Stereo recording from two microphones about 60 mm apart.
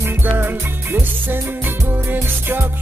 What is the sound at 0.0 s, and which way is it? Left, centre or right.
Music, right.